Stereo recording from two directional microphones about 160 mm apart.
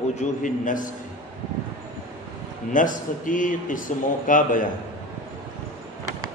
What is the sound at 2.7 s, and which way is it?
A man's voice, 55° left (ahead or behind).